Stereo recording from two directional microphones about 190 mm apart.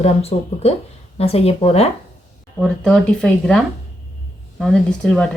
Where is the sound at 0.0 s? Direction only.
35° left (ahead or behind).